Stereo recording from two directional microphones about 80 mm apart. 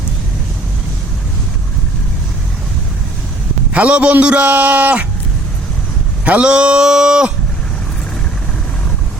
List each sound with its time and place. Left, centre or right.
3.7 s a man's voice: centre
6.2 s a man's voice: centre